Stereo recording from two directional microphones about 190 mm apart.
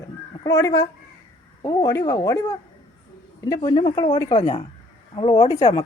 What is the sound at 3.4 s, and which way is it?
A woman's voice, 20° left (ahead or behind).